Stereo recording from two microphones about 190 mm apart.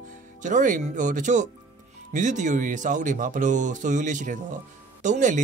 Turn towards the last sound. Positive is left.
turn(degrees=-40)  # may be behind; listen again after turning